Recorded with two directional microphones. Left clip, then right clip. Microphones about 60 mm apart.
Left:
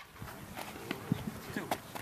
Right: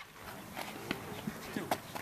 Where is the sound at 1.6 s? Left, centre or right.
Left.